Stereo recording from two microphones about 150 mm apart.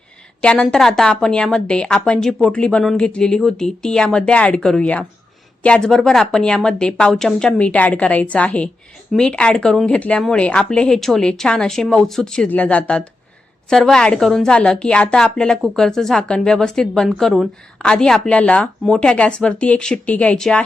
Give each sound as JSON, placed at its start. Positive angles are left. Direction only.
{"t": 0.4, "sound": "a woman's voice", "side_deg": 5}